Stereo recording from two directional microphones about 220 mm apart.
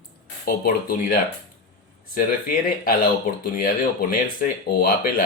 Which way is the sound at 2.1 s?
40° left (ahead or behind).